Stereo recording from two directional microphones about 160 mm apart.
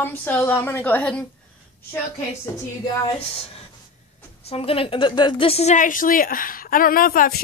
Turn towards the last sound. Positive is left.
turn(degrees=65)  # may be behind; listen again after turning